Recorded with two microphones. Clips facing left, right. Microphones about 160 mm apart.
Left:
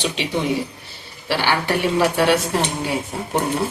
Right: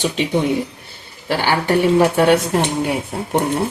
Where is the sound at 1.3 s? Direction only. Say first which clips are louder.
Right 3 dB; 45° right (ahead or behind).